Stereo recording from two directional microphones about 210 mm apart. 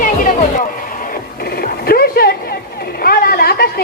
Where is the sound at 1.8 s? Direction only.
45° left (ahead or behind).